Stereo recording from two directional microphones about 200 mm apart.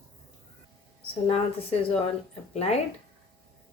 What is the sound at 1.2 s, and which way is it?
A woman's voice, 30° left (ahead or behind).